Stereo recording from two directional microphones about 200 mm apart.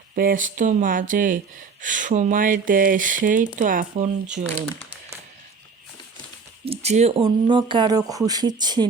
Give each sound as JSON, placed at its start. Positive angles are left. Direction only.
{"t": 0.2, "sound": "speech", "side_deg": -45}
{"t": 6.7, "sound": "speech", "side_deg": -35}